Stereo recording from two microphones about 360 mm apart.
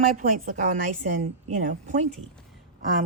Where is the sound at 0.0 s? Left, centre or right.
Right.